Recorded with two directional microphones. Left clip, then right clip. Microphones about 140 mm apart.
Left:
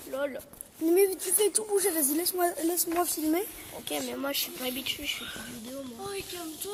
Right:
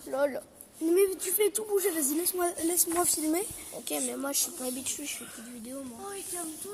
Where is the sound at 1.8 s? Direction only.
15° left (ahead or behind).